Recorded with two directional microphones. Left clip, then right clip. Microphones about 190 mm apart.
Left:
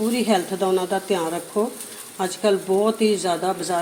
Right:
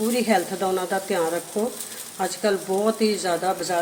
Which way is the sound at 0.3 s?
Centre (ahead or behind).